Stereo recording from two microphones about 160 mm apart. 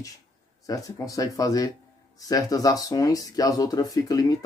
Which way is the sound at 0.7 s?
20° left (ahead or behind).